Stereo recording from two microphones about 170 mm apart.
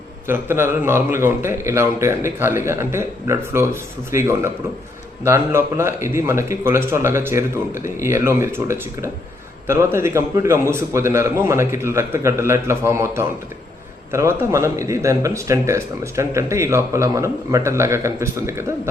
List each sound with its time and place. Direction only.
0.3 s speech: 15° right (ahead or behind)